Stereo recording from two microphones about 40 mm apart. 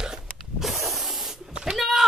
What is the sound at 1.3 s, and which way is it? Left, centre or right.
Spray, centre.